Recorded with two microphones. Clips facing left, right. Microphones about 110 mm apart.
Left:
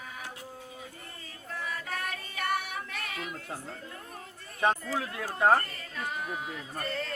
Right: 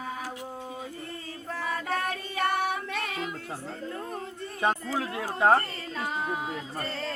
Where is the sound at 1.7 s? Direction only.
30° right (ahead or behind).